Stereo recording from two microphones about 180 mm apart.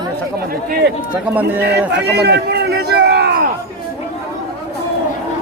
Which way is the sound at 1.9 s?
65° right (ahead or behind).